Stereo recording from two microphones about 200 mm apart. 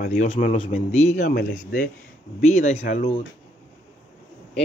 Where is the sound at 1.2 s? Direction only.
45° left (ahead or behind).